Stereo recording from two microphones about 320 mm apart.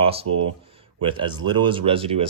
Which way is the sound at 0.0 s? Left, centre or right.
Centre.